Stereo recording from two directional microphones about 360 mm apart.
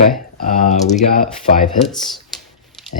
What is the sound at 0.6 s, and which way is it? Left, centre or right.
Speech, centre.